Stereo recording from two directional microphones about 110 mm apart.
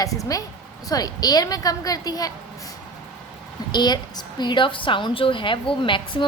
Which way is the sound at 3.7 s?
40° left (ahead or behind).